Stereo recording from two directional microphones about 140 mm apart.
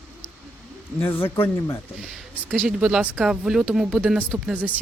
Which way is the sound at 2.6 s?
5° right (ahead or behind).